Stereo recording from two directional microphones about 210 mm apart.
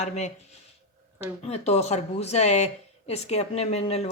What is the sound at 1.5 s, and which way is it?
Speech, 30° left (ahead or behind).